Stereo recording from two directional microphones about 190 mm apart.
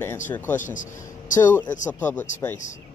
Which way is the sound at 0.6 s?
40° left (ahead or behind).